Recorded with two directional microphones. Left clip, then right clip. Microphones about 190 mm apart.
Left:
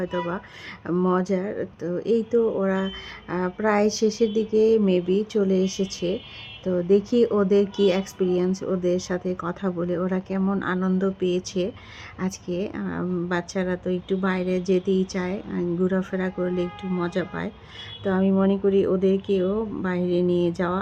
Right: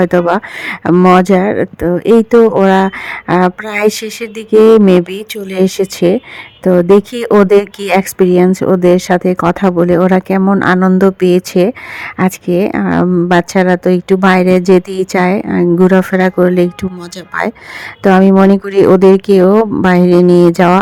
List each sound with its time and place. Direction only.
0.0 s speech: 50° right (ahead or behind)
18.0 s speech: 45° right (ahead or behind)
19.5 s speech: 40° right (ahead or behind)